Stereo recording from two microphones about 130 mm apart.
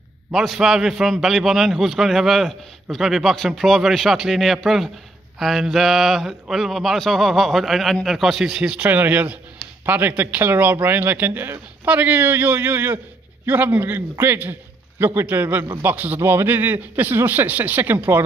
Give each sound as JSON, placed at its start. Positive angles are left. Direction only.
{"t": 0.3, "sound": "a man's voice", "side_deg": -5}